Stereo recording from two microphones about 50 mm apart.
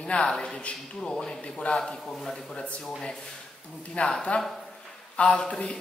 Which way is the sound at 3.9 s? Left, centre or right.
Centre.